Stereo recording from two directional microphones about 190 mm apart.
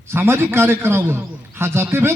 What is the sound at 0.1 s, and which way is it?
A man's voice, 10° right (ahead or behind).